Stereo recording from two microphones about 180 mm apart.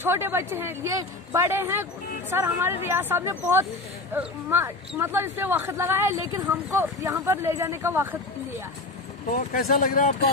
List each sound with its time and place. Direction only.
0.0 s speech: 10° right (ahead or behind)
9.5 s speech: 50° left (ahead or behind)